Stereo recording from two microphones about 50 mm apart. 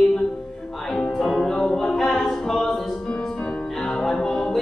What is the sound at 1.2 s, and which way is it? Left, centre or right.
Music, centre.